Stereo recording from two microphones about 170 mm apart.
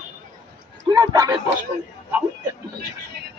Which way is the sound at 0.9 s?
20° right (ahead or behind).